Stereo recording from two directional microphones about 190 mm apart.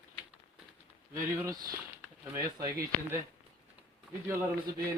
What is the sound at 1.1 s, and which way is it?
Speech, 15° right (ahead or behind).